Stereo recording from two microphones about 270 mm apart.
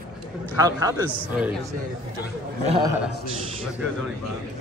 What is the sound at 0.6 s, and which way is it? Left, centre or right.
Speech, centre.